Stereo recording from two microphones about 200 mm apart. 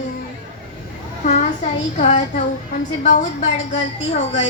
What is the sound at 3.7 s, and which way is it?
Speech, 35° left (ahead or behind).